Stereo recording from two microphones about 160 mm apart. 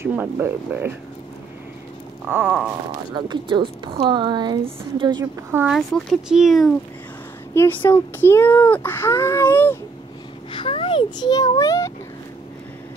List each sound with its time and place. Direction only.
0.0 s speech: 15° right (ahead or behind)
2.2 s a sound: 10° right (ahead or behind)
3.1 s a woman's voice: 30° right (ahead or behind)
5.7 s speech: centre (ahead or behind)
7.5 s speech: 10° left (ahead or behind)
10.5 s a child's voice: 35° left (ahead or behind)